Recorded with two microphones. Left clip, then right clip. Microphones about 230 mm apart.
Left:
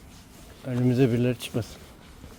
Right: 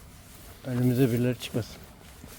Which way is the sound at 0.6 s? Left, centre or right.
Centre.